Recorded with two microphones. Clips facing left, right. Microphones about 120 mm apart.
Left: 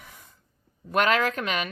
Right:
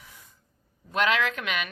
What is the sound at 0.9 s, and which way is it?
Speech, 45° left (ahead or behind).